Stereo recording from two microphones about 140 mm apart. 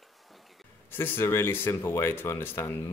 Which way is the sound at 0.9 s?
15° left (ahead or behind).